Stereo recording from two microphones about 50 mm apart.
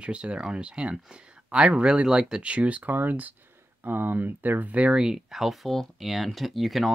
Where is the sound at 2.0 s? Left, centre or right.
Centre.